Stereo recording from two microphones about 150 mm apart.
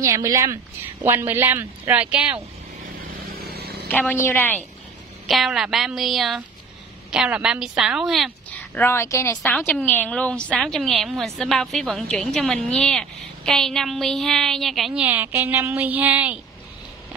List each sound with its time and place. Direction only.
0.0 s a woman's voice: 20° right (ahead or behind)
3.3 s vehicle: 90° right
3.9 s a woman's voice: 10° left (ahead or behind)
5.2 s a woman's voice: centre (ahead or behind)
8.5 s a woman's voice: 10° left (ahead or behind)
15.0 s speech: 15° right (ahead or behind)